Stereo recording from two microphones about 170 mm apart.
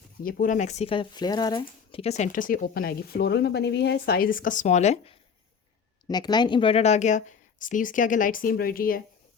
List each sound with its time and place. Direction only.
0.2 s speech: 55° left (ahead or behind)
6.1 s speech: 25° left (ahead or behind); by 9.0 s 60° left (ahead or behind)